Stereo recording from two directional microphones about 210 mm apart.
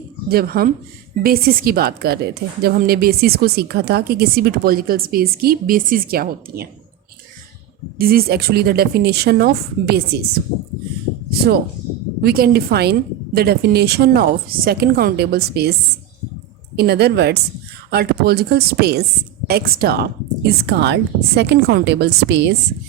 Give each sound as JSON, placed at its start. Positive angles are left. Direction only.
{"t": 0.3, "sound": "a woman's voice", "side_deg": -45}
{"t": 7.9, "sound": "a woman's voice", "side_deg": -45}
{"t": 11.3, "sound": "a woman's voice", "side_deg": -50}
{"t": 16.7, "sound": "a woman's voice", "side_deg": -50}